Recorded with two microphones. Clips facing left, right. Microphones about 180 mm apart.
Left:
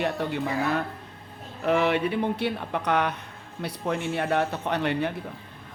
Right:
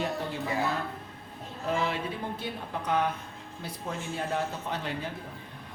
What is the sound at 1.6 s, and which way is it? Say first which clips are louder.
Speech: left 7 dB; 70° left (ahead or behind).